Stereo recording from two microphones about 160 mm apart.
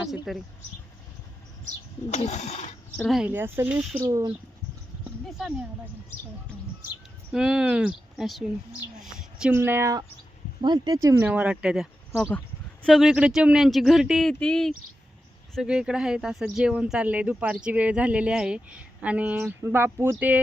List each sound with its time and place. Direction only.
0.0 s speech: centre (ahead or behind)
2.0 s speech: 45° left (ahead or behind)
3.1 s speech: 5° right (ahead or behind)
4.0 s speech: 20° right (ahead or behind)
7.3 s a woman's voice: 5° right (ahead or behind)
9.6 s speech: 15° right (ahead or behind); by 14.7 s 5° left (ahead or behind)
15.5 s speech: 5° right (ahead or behind)